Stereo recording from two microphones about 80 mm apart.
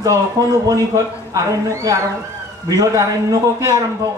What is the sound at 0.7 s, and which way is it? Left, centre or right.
Speech, right.